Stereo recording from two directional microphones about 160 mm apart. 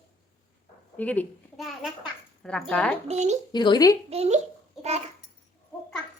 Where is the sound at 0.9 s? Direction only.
10° left (ahead or behind).